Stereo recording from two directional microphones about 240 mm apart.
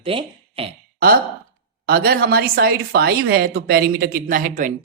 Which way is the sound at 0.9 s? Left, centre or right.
Right.